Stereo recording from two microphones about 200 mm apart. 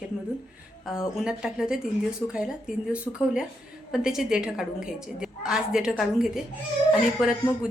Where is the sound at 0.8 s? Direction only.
Centre (ahead or behind).